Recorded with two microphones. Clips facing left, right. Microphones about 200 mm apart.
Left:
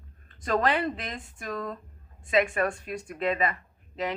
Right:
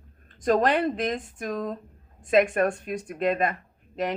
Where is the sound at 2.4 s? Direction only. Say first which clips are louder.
Right 4 dB; 45° right (ahead or behind).